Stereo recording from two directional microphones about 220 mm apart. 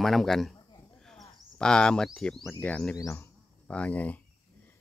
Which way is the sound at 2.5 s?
5° left (ahead or behind).